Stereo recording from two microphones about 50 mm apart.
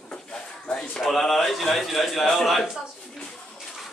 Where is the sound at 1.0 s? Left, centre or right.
Centre.